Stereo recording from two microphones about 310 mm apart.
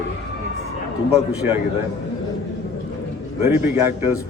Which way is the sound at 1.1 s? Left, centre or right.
Centre.